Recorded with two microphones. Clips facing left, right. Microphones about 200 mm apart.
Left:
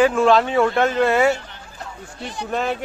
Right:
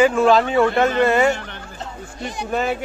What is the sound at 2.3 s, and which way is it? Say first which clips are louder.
Speech: right 1 dB; 5° right (ahead or behind).